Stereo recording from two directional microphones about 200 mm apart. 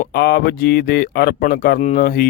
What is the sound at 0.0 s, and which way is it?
Speech, 50° left (ahead or behind).